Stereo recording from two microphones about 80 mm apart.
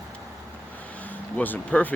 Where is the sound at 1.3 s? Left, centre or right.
Left.